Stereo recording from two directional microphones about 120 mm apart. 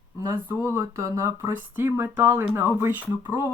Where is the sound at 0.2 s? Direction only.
20° right (ahead or behind).